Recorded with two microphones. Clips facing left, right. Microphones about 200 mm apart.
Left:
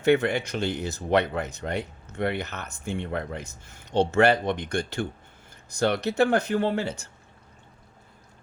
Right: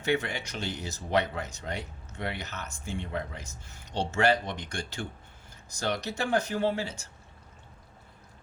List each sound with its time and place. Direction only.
0.0 s speech: 55° left (ahead or behind)